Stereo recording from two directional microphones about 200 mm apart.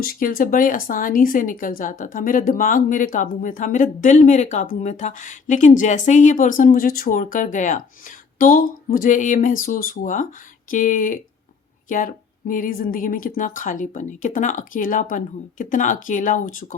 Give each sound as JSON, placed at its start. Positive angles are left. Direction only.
{"t": 0.0, "sound": "speech", "side_deg": 45}